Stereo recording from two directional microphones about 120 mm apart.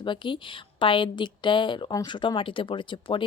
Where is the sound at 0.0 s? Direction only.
40° left (ahead or behind).